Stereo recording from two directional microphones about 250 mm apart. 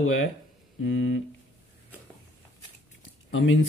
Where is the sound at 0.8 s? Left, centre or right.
Left.